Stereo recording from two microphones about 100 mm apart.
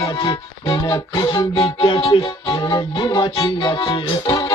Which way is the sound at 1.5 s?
55° left (ahead or behind).